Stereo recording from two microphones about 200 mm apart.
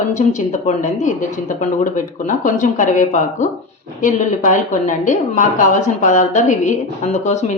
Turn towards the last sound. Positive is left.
turn(degrees=35)  # may be behind; listen again after turning